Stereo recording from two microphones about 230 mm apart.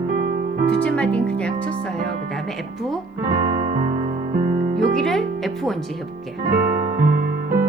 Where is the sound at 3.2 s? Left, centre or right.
Right.